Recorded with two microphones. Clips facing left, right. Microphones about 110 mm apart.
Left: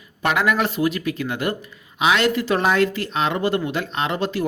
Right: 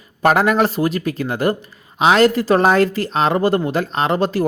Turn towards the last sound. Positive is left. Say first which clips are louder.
# right 5 dB
turn(degrees=-40)  # may be behind; listen again after turning